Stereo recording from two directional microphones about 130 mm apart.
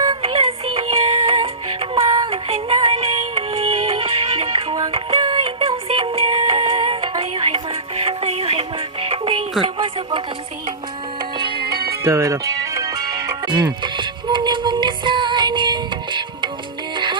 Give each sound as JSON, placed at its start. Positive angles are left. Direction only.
{"t": 0.2, "sound": "music", "side_deg": -45}
{"t": 9.6, "sound": "a sound", "side_deg": -35}
{"t": 12.0, "sound": "music", "side_deg": -20}